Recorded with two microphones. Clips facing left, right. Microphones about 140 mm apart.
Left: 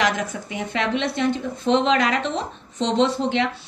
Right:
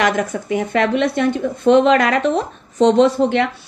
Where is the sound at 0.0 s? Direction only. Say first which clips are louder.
Right 5 dB; 55° right (ahead or behind).